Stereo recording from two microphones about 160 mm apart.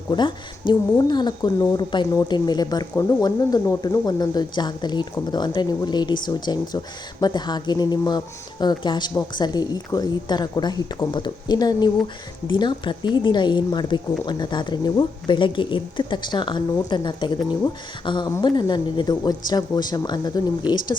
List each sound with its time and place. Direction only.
0.1 s speech: 30° left (ahead or behind)